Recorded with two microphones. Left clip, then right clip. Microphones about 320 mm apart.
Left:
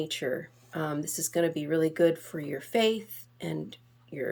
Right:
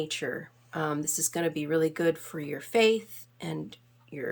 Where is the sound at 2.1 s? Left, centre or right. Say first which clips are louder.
Left 1 dB; right.